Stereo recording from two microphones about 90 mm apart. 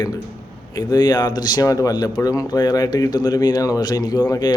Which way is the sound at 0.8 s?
50° left (ahead or behind).